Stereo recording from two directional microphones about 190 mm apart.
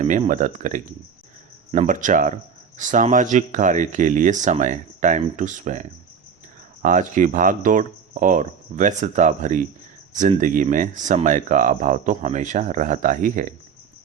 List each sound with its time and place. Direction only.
0.0 s speech: 40° right (ahead or behind)